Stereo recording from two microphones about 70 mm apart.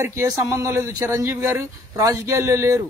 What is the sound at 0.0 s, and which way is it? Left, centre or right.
Speech, right.